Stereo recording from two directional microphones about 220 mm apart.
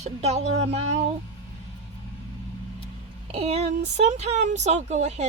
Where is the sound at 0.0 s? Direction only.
30° right (ahead or behind).